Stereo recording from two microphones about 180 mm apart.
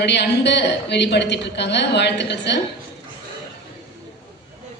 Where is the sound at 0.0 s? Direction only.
70° left (ahead or behind).